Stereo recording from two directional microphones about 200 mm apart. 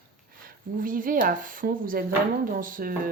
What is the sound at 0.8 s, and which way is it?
Speech, 45° right (ahead or behind).